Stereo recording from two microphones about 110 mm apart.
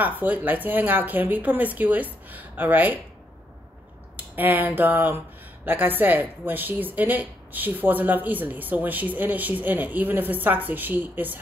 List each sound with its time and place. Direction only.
0.0 s a woman's voice: 15° right (ahead or behind)
4.4 s a woman's voice: 15° right (ahead or behind)